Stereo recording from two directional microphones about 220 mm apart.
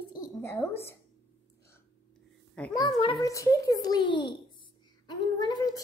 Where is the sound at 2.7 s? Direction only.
20° left (ahead or behind).